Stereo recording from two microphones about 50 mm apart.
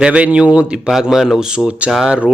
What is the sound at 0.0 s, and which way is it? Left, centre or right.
Speech, right.